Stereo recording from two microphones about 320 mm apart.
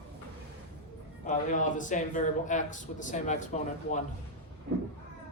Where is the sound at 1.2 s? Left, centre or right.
Left.